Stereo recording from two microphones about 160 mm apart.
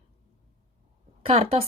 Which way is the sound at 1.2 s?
35° right (ahead or behind).